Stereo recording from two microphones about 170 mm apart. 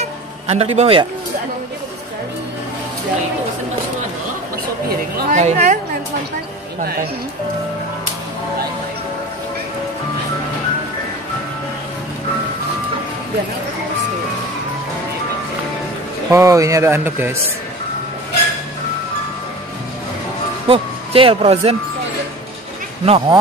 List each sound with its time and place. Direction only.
0.0 s music: 40° right (ahead or behind)
5.3 s a woman's voice: 45° right (ahead or behind)
16.3 s speech: 15° right (ahead or behind)
20.6 s speech: 30° right (ahead or behind)
23.0 s speech: 35° right (ahead or behind)